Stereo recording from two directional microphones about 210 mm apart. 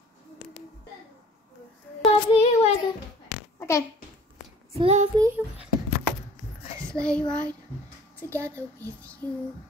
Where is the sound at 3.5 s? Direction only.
15° left (ahead or behind).